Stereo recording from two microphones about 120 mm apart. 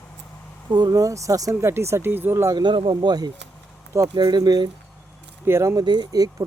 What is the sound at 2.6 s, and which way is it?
Speech, 40° right (ahead or behind).